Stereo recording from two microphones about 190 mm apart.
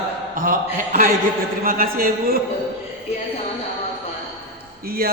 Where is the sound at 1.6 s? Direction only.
50° right (ahead or behind).